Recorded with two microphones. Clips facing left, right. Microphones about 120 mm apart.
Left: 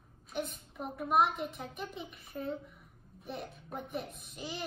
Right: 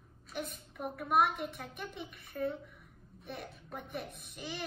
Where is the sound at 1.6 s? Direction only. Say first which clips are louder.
Left 2 dB; 25° left (ahead or behind).